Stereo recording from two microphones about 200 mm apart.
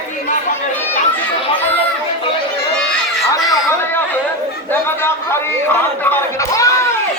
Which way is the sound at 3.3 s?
15° left (ahead or behind).